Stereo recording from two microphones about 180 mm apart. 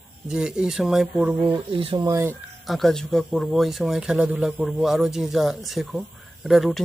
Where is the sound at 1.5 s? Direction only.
30° right (ahead or behind).